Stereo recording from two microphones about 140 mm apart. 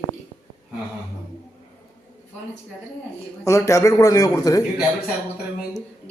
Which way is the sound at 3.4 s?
20° left (ahead or behind).